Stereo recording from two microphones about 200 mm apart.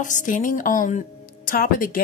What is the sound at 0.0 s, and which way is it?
A woman's voice, 40° left (ahead or behind).